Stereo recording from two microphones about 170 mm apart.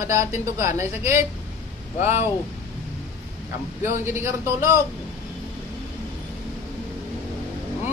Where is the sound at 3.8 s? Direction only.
15° right (ahead or behind).